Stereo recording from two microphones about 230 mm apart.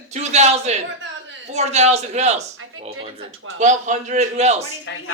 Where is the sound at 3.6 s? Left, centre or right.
Right.